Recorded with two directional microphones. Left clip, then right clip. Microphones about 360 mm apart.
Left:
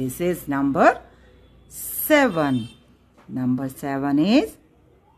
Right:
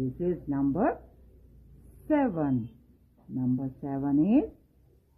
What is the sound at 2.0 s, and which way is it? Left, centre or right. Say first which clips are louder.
A woman's voice: left 10 dB; centre.